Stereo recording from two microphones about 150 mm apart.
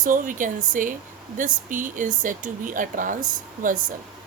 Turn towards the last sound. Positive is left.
turn(degrees=-60)  # may be behind; listen again after turning